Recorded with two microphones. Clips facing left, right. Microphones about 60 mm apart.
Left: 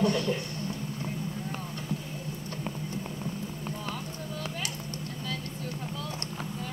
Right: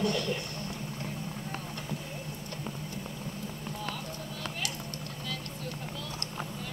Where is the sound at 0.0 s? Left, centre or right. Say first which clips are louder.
Left 3 dB; left.